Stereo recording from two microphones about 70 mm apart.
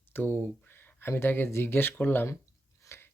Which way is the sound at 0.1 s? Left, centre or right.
Left.